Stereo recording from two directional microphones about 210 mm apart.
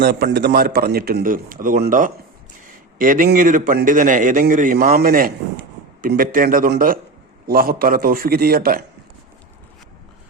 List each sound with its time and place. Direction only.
0.0 s a man's voice: 50° right (ahead or behind)